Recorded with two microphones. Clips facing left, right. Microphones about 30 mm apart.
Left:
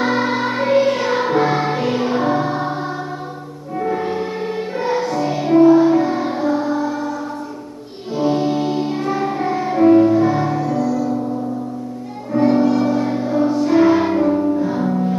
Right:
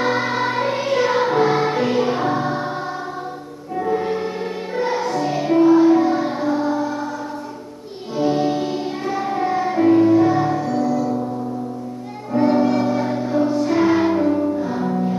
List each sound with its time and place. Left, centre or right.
0.0 s music: centre
3.8 s music: centre
8.2 s music: centre
10.9 s gong: centre
12.3 s music: centre